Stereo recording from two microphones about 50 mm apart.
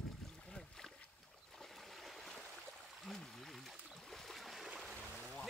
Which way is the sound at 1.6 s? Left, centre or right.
Centre.